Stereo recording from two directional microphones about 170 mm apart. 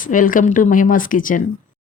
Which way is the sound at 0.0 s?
50° left (ahead or behind).